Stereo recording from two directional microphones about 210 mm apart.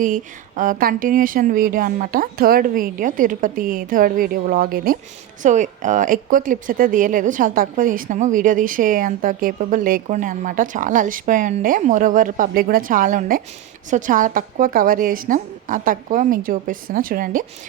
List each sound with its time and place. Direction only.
0.0 s a woman's voice: 40° right (ahead or behind)